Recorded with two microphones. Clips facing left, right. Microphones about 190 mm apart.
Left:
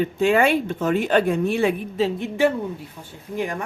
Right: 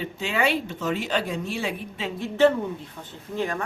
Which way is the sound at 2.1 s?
15° left (ahead or behind).